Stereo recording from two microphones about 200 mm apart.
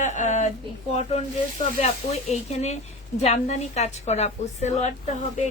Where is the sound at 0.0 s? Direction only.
35° left (ahead or behind).